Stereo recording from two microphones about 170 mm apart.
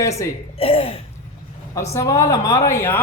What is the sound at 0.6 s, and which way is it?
Throat clearing, 35° left (ahead or behind).